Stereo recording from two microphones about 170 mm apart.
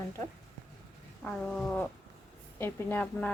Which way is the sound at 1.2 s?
5° left (ahead or behind).